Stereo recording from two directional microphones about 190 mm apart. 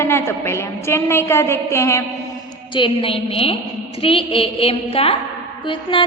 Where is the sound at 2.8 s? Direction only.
30° left (ahead or behind).